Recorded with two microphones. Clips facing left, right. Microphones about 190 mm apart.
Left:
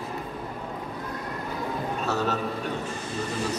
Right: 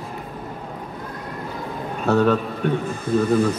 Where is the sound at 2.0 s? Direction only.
60° right (ahead or behind).